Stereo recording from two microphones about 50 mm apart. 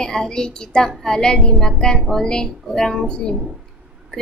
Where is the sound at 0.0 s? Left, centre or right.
Centre.